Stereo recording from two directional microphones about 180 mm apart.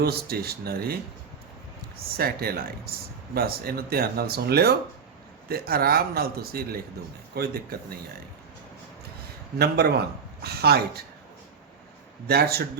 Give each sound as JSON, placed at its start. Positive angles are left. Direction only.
{"t": 0.0, "sound": "speech", "side_deg": -60}
{"t": 2.0, "sound": "speech", "side_deg": -55}
{"t": 9.6, "sound": "speech", "side_deg": -65}
{"t": 12.3, "sound": "speech", "side_deg": -60}